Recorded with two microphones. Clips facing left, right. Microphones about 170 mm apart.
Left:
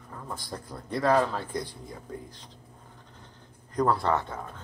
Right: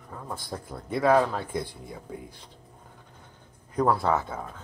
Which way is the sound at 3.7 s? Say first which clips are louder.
Right 1 dB; 5° right (ahead or behind).